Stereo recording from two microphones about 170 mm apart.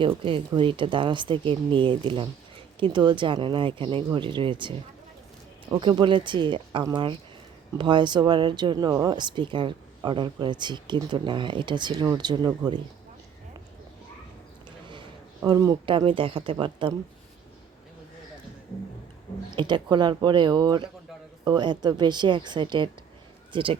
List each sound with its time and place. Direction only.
0.3 s speech: 30° right (ahead or behind)
5.7 s speech: 30° right (ahead or behind)
15.4 s speech: 20° right (ahead or behind)
19.5 s speech: 25° right (ahead or behind)